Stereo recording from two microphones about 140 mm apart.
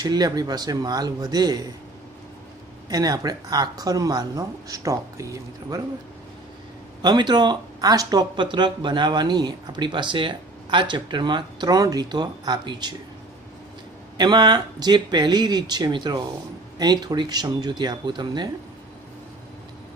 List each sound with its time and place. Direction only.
0.0 s speech: 30° right (ahead or behind)
2.9 s speech: 25° right (ahead or behind)
7.0 s speech: 30° right (ahead or behind)
14.1 s speech: 30° right (ahead or behind)